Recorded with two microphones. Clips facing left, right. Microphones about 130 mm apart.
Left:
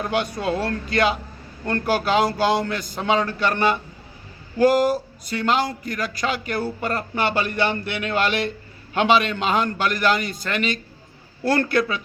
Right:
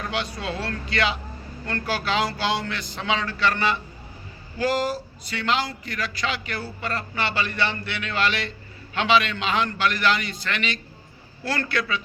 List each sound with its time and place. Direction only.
0.0 s a man's voice: 50° left (ahead or behind)